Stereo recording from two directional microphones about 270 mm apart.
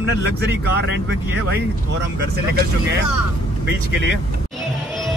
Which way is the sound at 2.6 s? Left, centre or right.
Right.